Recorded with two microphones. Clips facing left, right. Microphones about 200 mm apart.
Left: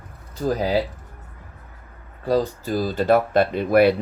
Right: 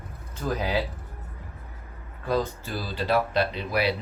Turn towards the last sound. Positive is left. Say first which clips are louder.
# left 10 dB
turn(degrees=50)  # may be behind; listen again after turning